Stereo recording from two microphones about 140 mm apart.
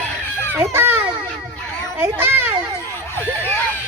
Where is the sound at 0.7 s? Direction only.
15° right (ahead or behind).